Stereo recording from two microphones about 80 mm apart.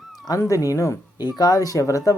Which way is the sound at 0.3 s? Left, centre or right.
Left.